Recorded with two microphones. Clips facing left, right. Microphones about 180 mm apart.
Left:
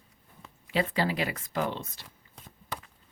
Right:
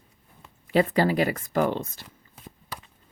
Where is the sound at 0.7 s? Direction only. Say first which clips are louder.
Right 7 dB; 45° right (ahead or behind).